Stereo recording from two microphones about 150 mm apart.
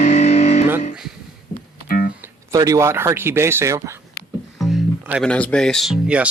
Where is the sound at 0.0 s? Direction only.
50° left (ahead or behind).